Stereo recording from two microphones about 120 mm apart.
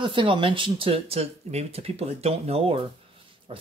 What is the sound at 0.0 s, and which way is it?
Speech, 45° right (ahead or behind).